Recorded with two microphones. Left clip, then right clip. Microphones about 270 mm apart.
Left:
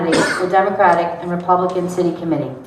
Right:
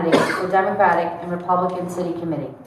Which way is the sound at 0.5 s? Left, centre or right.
Left.